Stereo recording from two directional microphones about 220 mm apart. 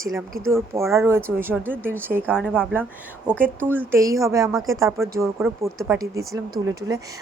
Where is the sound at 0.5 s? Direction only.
10° right (ahead or behind).